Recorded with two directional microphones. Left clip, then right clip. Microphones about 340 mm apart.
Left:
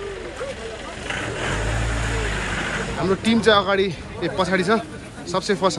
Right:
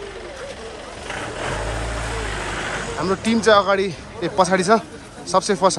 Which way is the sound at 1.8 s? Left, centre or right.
Right.